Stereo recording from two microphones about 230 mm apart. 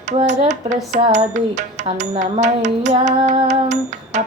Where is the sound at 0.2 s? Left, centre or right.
Right.